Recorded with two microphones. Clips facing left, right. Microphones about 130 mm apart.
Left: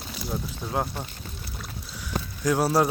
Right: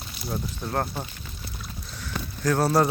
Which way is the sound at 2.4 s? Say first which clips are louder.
Right 1 dB; 10° left (ahead or behind).